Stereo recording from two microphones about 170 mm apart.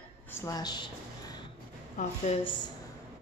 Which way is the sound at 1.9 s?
40° left (ahead or behind).